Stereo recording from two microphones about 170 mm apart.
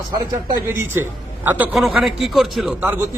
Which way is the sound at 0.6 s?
15° right (ahead or behind).